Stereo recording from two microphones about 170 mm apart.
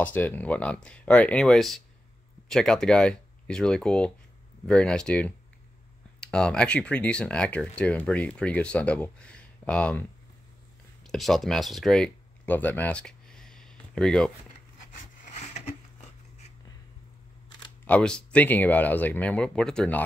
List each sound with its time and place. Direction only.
0.0 s speech: 10° left (ahead or behind)
11.1 s speech: centre (ahead or behind)
15.2 s a sound: 45° left (ahead or behind)
17.8 s speech: 5° left (ahead or behind)